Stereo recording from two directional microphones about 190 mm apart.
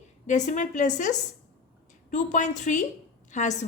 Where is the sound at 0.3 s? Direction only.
40° left (ahead or behind).